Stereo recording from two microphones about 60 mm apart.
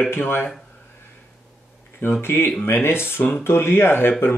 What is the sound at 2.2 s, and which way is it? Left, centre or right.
Speech, left.